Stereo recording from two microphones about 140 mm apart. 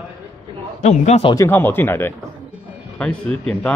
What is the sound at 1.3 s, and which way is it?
Speech, 15° left (ahead or behind).